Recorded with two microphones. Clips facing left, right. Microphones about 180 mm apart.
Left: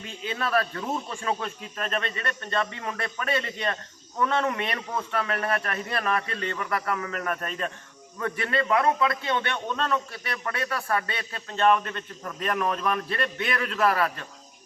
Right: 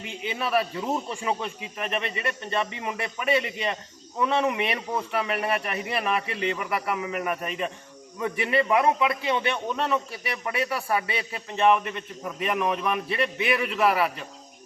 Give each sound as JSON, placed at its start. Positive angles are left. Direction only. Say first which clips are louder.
{"t": 0.0, "sound": "speech", "louder": "right 2 dB", "side_deg": -75}
{"t": 0.3, "sound": "a man's voice", "louder": "right 1 dB", "side_deg": -10}